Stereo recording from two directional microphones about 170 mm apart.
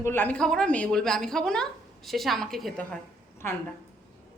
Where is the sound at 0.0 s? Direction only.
10° left (ahead or behind).